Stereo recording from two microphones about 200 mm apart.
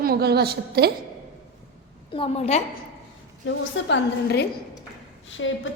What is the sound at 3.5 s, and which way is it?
A woman's voice, 65° left (ahead or behind).